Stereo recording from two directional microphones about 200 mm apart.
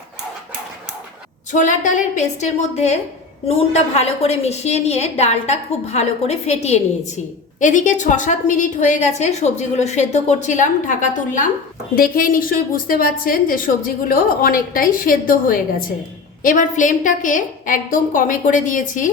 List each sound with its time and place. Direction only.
1.5 s a woman's voice: 40° left (ahead or behind)